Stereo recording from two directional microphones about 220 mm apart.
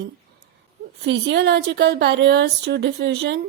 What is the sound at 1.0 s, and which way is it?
A woman's voice, 50° right (ahead or behind).